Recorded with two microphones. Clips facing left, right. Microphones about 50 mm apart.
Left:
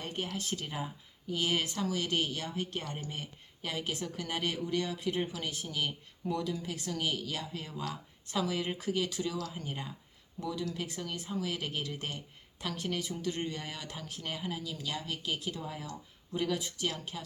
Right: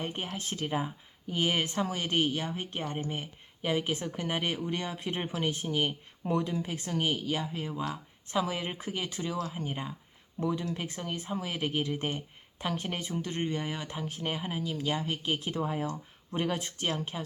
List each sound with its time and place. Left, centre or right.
0.0 s speech: right
10.4 s speech: right